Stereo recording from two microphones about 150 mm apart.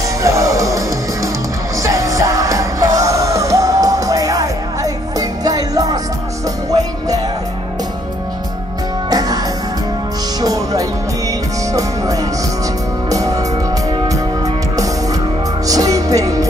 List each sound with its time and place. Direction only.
0.2 s music: 20° right (ahead or behind)
9.1 s music: 25° right (ahead or behind)
10.4 s music: 25° right (ahead or behind)